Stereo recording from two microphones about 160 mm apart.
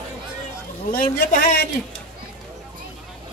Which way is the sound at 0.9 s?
60° left (ahead or behind).